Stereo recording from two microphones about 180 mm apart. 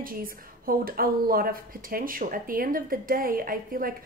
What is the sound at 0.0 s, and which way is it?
A woman's voice, 55° right (ahead or behind).